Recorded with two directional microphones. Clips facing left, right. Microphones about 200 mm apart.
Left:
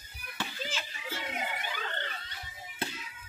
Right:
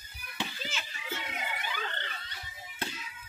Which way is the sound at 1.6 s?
45° left (ahead or behind).